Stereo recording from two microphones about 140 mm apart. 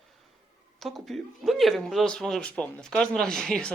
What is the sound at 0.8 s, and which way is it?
Speech, centre (ahead or behind).